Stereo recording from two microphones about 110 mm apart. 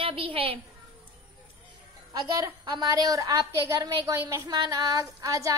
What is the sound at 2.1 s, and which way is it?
Speech, 35° right (ahead or behind).